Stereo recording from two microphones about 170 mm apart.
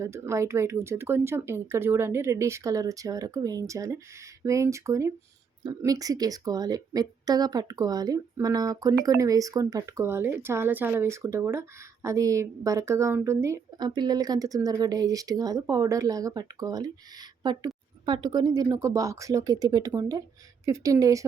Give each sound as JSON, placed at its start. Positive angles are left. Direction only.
{"t": 0.0, "sound": "a woman's voice", "side_deg": -15}